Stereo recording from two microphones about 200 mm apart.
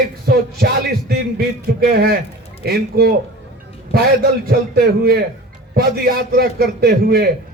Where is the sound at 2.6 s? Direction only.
50° right (ahead or behind).